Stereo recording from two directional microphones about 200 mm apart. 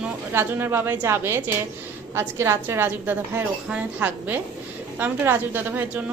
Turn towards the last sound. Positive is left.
turn(degrees=-10)  # may be behind; listen again after turning